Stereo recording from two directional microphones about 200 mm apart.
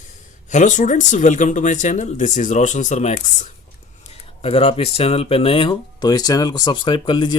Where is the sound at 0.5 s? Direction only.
40° left (ahead or behind).